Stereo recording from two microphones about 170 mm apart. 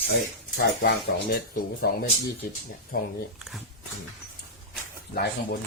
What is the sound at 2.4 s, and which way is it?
Speech, 60° left (ahead or behind).